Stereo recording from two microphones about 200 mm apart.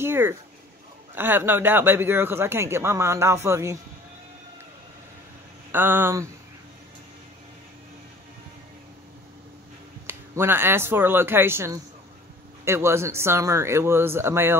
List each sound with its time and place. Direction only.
0.0 s speech: 10° right (ahead or behind)
5.7 s speech: 10° right (ahead or behind)
10.0 s speech: 10° right (ahead or behind)